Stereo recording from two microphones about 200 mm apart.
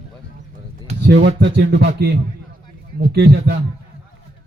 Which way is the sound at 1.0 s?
60° right (ahead or behind).